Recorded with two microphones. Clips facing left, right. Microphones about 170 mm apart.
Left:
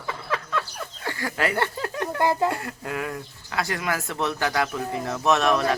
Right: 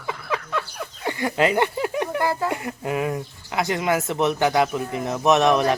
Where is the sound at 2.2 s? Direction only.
20° left (ahead or behind).